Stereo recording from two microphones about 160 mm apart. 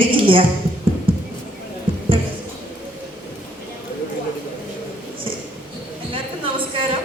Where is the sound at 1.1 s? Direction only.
35° right (ahead or behind).